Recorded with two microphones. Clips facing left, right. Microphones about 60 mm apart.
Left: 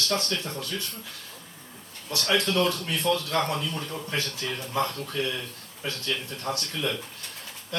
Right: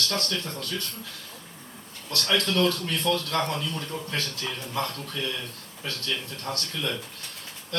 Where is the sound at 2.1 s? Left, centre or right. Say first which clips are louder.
Left 1 dB; centre.